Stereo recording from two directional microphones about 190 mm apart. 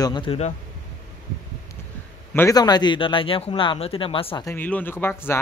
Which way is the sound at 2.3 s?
15° left (ahead or behind).